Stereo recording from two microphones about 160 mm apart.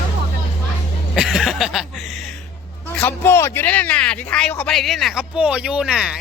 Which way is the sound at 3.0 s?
15° left (ahead or behind).